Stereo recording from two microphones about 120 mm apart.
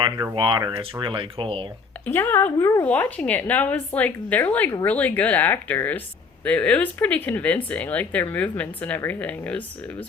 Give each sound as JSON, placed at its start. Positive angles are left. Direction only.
{"t": 0.3, "sound": "speech", "side_deg": -40}
{"t": 2.0, "sound": "speech", "side_deg": 20}
{"t": 2.8, "sound": "speech", "side_deg": 10}